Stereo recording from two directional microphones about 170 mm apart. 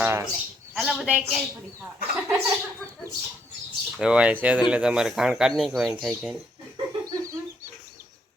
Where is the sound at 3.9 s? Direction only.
5° right (ahead or behind).